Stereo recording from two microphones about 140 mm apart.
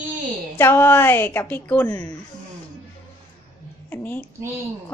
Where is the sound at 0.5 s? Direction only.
15° left (ahead or behind).